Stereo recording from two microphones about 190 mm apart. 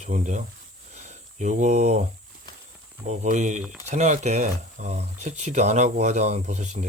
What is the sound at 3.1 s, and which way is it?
Speech, 40° right (ahead or behind).